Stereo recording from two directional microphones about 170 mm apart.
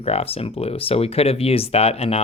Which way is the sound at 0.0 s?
35° left (ahead or behind).